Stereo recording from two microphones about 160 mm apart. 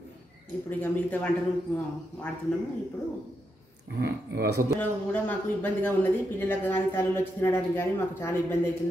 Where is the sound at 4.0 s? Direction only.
85° right.